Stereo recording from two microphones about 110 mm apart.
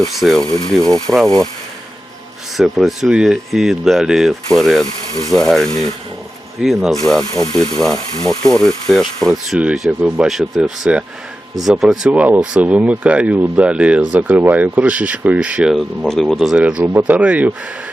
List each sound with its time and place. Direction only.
0.0 s speech: centre (ahead or behind)
2.6 s speech: centre (ahead or behind)
7.9 s speech: 35° left (ahead or behind)
8.4 s speech: 5° left (ahead or behind); by 15.7 s 10° right (ahead or behind)
15.7 s speech: centre (ahead or behind)